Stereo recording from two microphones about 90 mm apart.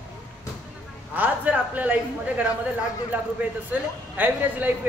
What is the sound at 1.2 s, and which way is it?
Speech, 15° right (ahead or behind).